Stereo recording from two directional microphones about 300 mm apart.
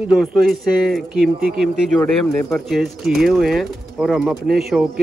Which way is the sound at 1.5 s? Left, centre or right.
Centre.